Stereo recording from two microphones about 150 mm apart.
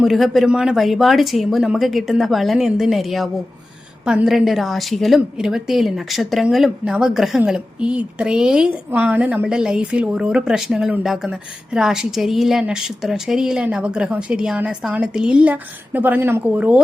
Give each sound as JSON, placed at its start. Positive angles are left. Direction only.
{"t": 0.0, "sound": "a woman's voice", "side_deg": 0}